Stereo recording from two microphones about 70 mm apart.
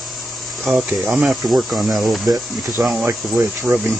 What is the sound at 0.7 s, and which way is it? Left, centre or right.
Speech, centre.